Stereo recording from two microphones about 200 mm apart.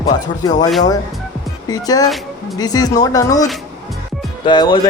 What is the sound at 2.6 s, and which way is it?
Speech, 20° left (ahead or behind).